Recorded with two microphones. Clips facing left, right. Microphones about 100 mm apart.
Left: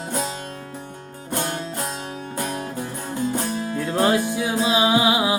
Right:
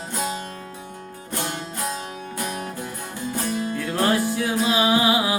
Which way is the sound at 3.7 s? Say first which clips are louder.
Left 3 dB; 20° left (ahead or behind).